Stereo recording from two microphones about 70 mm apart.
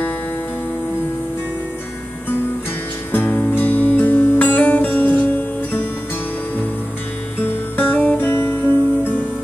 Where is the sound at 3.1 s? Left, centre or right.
Left.